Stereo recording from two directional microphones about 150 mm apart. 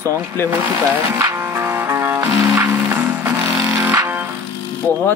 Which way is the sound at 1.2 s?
15° right (ahead or behind).